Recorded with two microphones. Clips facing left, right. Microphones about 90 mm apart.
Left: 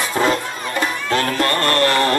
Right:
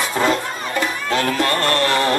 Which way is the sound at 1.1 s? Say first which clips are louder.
Even; 45° left (ahead or behind).